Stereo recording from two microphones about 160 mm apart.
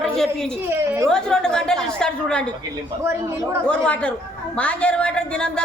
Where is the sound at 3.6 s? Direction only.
5° left (ahead or behind).